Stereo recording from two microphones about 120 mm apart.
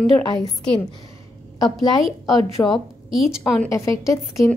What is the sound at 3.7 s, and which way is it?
Speech, 25° left (ahead or behind).